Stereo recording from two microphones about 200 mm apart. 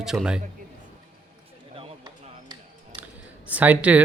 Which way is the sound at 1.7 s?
20° right (ahead or behind).